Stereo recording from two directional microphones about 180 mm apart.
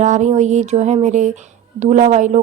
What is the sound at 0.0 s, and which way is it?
Speech, 40° right (ahead or behind).